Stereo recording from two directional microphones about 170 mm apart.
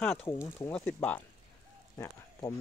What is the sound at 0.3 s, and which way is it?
Speech, 15° left (ahead or behind).